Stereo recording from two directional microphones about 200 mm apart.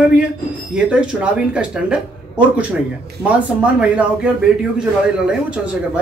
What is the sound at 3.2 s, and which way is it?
Speech, 5° right (ahead or behind).